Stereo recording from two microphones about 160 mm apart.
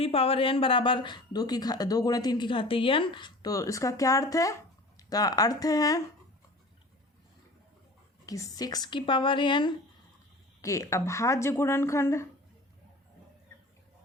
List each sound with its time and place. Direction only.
0.0 s speech: 35° left (ahead or behind)
8.3 s speech: 20° left (ahead or behind)
10.6 s speech: 20° left (ahead or behind)